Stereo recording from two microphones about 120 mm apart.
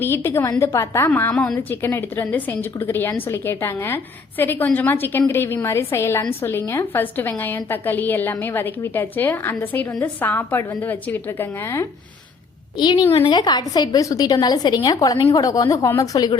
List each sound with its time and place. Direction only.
0.0 s a woman's voice: 20° left (ahead or behind)
12.7 s a woman's voice: 35° left (ahead or behind)